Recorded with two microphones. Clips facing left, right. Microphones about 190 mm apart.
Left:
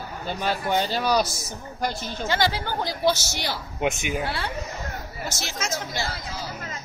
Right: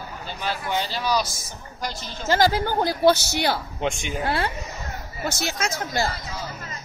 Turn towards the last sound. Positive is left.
turn(degrees=-55)  # may be behind; listen again after turning